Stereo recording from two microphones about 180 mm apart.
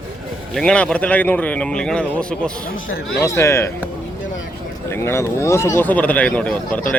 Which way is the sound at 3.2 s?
15° left (ahead or behind).